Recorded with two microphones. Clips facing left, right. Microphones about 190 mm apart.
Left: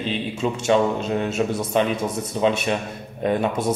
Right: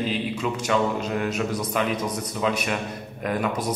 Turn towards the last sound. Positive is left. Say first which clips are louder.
# left 4 dB
turn(degrees=25)  # may be behind; listen again after turning